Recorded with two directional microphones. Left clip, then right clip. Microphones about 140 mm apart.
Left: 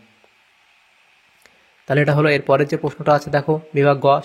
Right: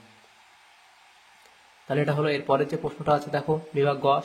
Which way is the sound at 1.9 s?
45° left (ahead or behind).